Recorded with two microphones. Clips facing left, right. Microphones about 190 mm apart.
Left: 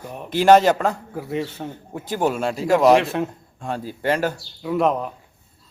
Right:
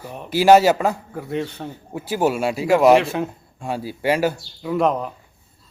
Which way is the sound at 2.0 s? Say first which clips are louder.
Right 2 dB; 10° right (ahead or behind).